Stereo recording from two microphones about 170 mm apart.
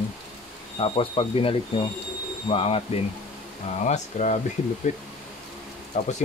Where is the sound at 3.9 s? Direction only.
45° left (ahead or behind).